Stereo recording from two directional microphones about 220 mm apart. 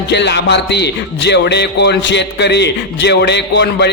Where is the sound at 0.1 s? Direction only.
50° left (ahead or behind).